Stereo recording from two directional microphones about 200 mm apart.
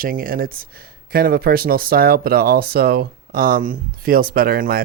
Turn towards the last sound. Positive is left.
turn(degrees=-45)  # may be behind; listen again after turning